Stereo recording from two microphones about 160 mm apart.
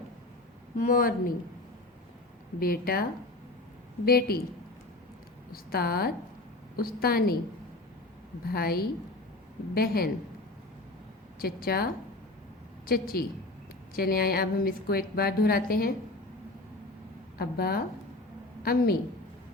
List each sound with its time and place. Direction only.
0.8 s a woman's voice: 60° left (ahead or behind)
2.6 s a woman's voice: 70° left (ahead or behind)
5.5 s a woman's voice: 70° left (ahead or behind)
8.5 s a woman's voice: 75° left (ahead or behind)
11.3 s a woman's voice: 70° left (ahead or behind)
17.3 s a woman's voice: 75° left (ahead or behind)